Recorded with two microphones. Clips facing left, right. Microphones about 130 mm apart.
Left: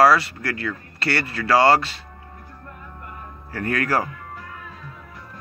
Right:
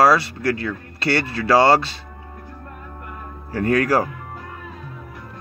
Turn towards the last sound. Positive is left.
turn(degrees=-20)  # may be behind; listen again after turning